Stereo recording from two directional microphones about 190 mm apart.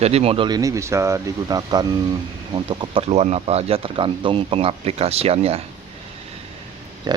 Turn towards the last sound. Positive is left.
turn(degrees=-20)  # may be behind; listen again after turning